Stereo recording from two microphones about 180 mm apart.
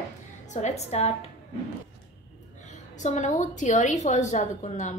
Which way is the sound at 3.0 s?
40° left (ahead or behind).